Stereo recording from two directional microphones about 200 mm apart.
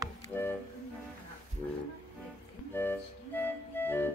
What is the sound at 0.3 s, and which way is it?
Music, 10° left (ahead or behind).